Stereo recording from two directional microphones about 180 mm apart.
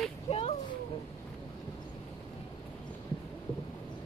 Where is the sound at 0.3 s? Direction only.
30° left (ahead or behind).